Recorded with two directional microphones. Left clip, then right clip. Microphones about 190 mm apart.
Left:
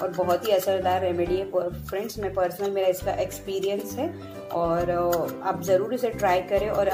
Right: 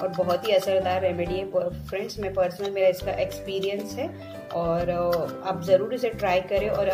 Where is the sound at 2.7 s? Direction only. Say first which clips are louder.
Right 4 dB; 20° left (ahead or behind).